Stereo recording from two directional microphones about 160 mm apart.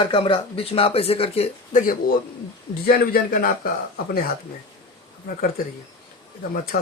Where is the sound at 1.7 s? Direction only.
60° left (ahead or behind).